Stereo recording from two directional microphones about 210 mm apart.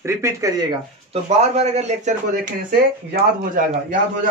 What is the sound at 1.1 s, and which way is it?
Speech, 30° right (ahead or behind).